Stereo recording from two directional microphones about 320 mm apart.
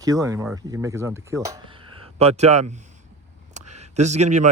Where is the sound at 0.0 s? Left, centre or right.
Centre.